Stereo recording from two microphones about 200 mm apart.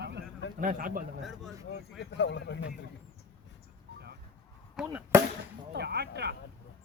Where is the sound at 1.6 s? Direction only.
55° left (ahead or behind).